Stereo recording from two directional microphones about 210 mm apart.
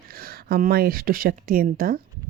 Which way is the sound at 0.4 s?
45° right (ahead or behind).